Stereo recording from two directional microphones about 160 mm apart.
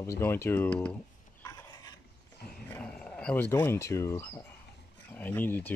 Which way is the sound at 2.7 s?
5° left (ahead or behind).